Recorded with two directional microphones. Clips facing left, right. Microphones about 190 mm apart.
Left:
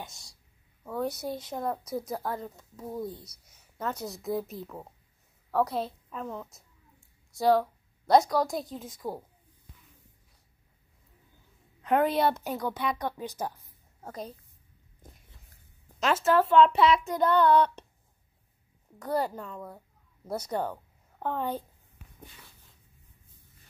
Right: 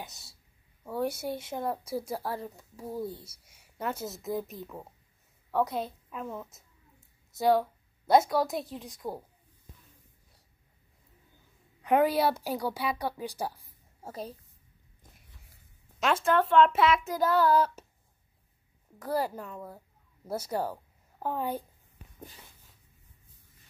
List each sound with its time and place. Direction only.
0.0 s speech: 5° right (ahead or behind)
0.8 s a woman's voice: 30° right (ahead or behind)
1.3 s a woman's voice: 5° right (ahead or behind)
1.6 s a woman's voice: 25° right (ahead or behind)
2.3 s a woman's voice: 10° right (ahead or behind)
11.8 s a woman's voice: 10° right (ahead or behind)
16.0 s speech: 5° left (ahead or behind)
18.9 s a woman's voice: centre (ahead or behind)